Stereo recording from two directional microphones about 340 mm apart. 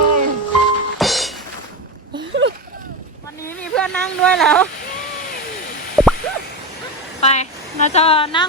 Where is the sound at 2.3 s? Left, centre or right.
Right.